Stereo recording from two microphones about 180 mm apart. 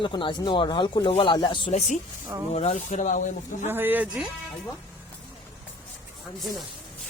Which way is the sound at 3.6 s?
10° right (ahead or behind).